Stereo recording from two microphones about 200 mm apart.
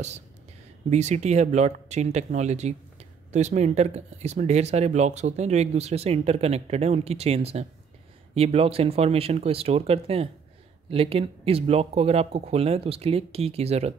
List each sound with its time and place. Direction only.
0.8 s speech: 35° right (ahead or behind)